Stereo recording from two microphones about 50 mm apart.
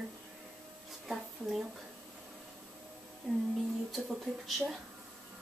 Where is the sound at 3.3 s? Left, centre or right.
Centre.